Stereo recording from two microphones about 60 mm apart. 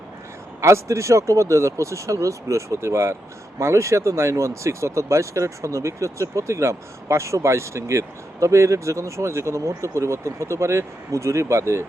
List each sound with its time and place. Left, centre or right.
0.6 s speech: right